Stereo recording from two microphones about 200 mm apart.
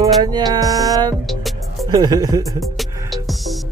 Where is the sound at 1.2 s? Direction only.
Centre (ahead or behind).